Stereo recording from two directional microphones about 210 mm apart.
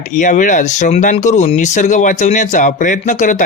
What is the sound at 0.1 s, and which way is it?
Speech, 35° left (ahead or behind).